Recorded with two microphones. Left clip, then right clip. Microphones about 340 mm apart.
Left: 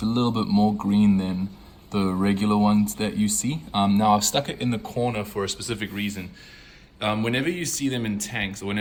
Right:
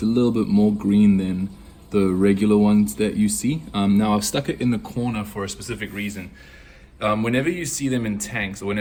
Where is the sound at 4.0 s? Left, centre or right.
Left.